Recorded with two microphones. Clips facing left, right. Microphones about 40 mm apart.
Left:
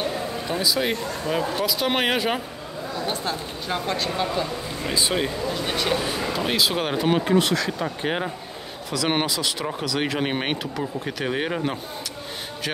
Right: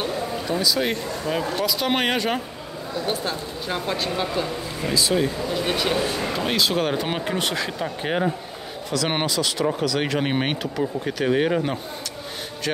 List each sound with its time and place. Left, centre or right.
0.5 s speech: centre
0.7 s speech: centre
4.8 s speech: left
5.5 s speech: centre
7.1 s speech: centre